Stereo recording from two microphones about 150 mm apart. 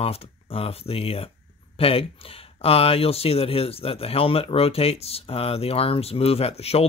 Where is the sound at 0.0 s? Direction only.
40° left (ahead or behind).